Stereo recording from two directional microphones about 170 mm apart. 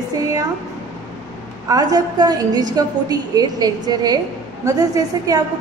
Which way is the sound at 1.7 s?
20° right (ahead or behind).